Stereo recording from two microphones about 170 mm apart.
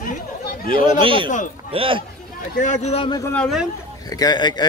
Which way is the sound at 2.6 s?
40° left (ahead or behind).